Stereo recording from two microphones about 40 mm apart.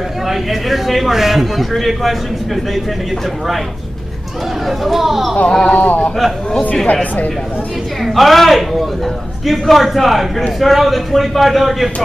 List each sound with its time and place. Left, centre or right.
0.3 s speech: centre
4.6 s speech: centre
5.5 s speech: centre
5.8 s speech: left
6.1 s speech: centre
6.9 s speech: left
8.0 s speech: centre